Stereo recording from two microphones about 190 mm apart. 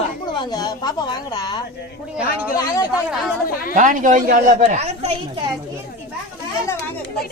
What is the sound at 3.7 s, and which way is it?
A woman's voice, 45° right (ahead or behind).